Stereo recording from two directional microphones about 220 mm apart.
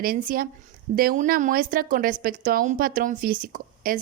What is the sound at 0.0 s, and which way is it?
A woman's voice, 40° right (ahead or behind).